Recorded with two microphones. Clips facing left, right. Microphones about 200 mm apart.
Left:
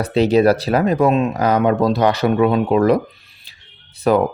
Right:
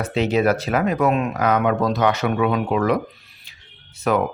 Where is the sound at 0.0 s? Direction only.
35° left (ahead or behind).